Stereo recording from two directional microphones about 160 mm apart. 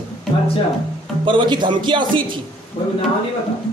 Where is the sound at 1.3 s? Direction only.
30° right (ahead or behind).